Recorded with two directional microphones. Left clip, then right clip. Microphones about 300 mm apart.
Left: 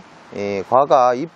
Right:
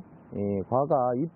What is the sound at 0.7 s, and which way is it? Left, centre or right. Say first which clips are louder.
Speech: left 12 dB; centre.